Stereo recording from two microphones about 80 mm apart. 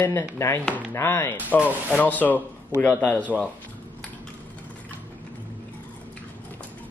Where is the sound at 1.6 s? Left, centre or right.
Centre.